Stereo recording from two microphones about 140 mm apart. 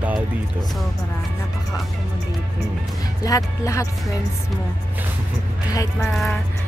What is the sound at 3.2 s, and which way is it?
Speech, 25° left (ahead or behind).